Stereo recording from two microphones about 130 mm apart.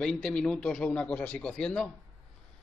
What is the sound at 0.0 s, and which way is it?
A man's voice, 5° left (ahead or behind).